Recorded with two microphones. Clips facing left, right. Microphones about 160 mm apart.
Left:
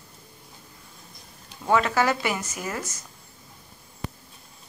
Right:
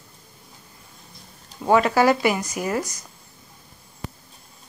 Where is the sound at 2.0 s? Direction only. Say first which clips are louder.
Right 6 dB; 15° right (ahead or behind).